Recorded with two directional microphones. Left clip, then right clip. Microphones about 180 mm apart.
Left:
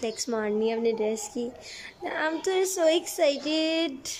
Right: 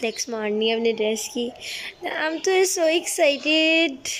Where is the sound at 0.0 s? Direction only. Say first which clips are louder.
Right 3 dB; centre (ahead or behind).